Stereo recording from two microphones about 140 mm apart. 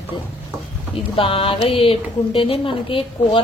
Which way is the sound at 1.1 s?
40° left (ahead or behind).